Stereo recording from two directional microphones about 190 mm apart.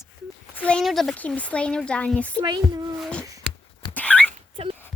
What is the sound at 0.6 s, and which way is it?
Speech, 5° left (ahead or behind).